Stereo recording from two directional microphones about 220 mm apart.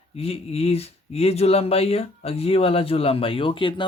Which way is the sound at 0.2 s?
25° left (ahead or behind).